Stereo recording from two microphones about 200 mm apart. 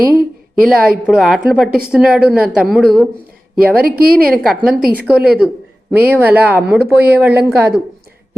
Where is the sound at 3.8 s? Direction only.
45° right (ahead or behind).